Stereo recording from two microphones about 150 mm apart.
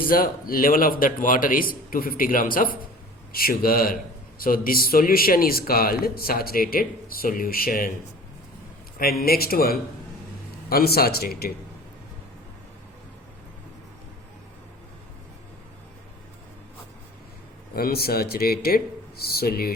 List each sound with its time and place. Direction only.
0.0 s a man's voice: 75° left (ahead or behind)
9.0 s speech: 85° left
17.7 s speech: 90° left